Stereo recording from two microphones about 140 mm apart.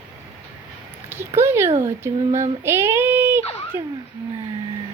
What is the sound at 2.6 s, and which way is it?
Child singing, 20° right (ahead or behind).